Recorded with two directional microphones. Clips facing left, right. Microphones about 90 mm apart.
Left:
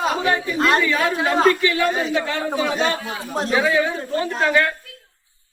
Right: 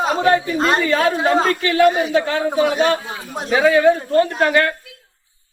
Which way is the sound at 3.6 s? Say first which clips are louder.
Right 8 dB; 55° right (ahead or behind).